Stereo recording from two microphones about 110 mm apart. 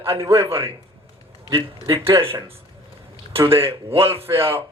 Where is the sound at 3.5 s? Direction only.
55° right (ahead or behind).